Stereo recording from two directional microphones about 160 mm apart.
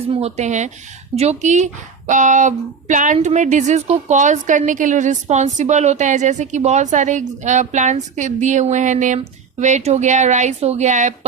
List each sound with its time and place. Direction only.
0.1 s speech: 40° right (ahead or behind)